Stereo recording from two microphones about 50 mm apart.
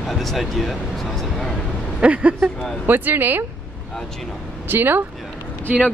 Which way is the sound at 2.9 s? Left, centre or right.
Right.